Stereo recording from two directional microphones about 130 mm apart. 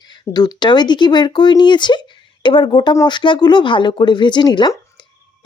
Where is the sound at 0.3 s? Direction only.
35° left (ahead or behind).